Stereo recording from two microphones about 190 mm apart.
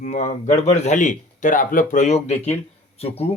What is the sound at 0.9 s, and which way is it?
Speech, 40° left (ahead or behind).